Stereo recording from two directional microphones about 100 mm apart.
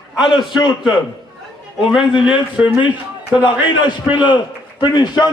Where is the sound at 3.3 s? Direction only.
50° left (ahead or behind).